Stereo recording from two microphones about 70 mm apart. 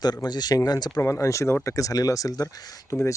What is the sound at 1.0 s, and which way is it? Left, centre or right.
Speech, left.